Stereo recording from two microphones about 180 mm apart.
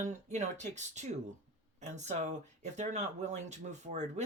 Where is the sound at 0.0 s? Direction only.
40° right (ahead or behind).